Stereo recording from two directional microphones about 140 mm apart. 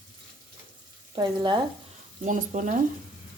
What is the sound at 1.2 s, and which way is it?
Speech, 30° right (ahead or behind).